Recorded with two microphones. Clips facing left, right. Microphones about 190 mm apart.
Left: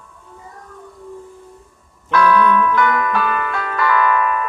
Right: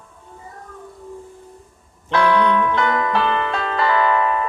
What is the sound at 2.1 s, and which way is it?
Music, 25° right (ahead or behind).